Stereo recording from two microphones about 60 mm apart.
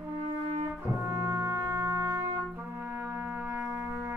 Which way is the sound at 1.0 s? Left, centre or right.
Right.